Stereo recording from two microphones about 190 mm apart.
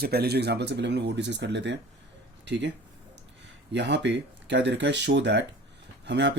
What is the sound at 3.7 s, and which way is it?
Speech, 65° right (ahead or behind).